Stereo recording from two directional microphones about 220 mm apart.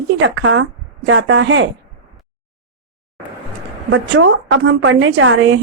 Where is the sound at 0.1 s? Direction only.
60° right (ahead or behind).